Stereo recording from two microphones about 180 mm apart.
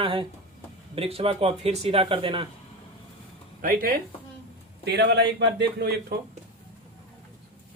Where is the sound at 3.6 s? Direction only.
50° right (ahead or behind).